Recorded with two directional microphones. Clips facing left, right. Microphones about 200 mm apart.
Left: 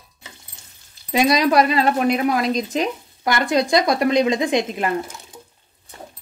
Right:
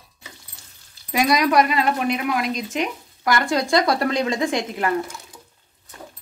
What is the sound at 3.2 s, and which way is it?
Speech, 20° left (ahead or behind).